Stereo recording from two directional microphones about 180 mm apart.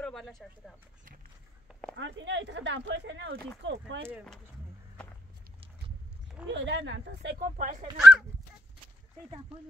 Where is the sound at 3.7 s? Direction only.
90° right.